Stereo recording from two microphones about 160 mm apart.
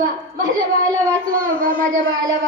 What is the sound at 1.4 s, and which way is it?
Speech, 60° right (ahead or behind).